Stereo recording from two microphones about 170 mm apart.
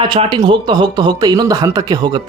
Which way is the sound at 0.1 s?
30° right (ahead or behind).